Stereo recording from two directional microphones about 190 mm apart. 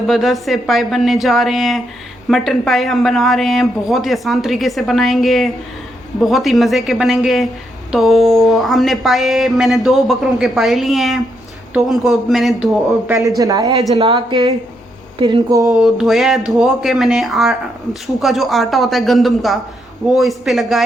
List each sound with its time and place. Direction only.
0.1 s a woman's voice: centre (ahead or behind)
13.2 s speech: 20° right (ahead or behind)
15.6 s a woman's voice: centre (ahead or behind)